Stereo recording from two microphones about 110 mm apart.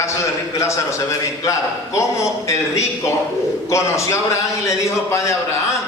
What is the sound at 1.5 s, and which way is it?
A man's voice, 30° left (ahead or behind).